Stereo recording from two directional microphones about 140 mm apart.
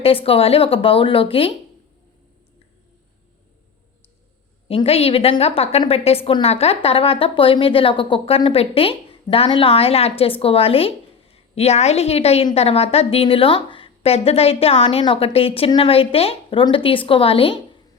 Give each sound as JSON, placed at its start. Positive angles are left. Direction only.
{"t": 0.0, "sound": "speech", "side_deg": 40}
{"t": 4.7, "sound": "speech", "side_deg": 45}